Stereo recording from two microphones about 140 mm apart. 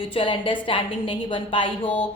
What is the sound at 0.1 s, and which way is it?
Speech, 40° left (ahead or behind).